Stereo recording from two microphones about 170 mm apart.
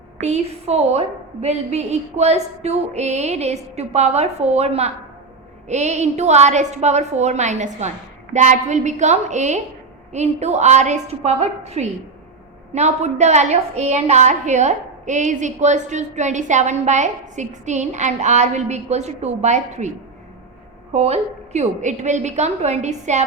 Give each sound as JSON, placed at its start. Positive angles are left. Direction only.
{"t": 0.2, "sound": "a woman's voice", "side_deg": -40}
{"t": 20.9, "sound": "a woman's voice", "side_deg": -40}